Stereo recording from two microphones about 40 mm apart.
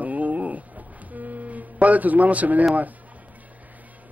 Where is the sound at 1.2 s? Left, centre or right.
Right.